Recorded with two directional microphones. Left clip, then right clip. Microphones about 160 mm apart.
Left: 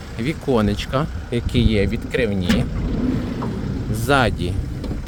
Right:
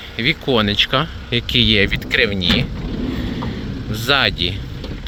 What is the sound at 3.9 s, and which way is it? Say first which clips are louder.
Speech: right 2 dB; 20° left (ahead or behind).